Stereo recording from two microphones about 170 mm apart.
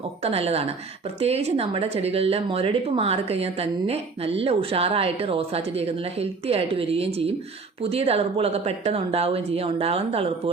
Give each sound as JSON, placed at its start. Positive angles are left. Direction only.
{"t": 0.2, "sound": "speech", "side_deg": -35}